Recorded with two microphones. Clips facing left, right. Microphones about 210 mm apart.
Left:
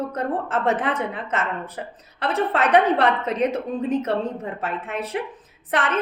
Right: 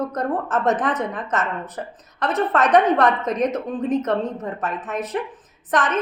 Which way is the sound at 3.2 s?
10° left (ahead or behind).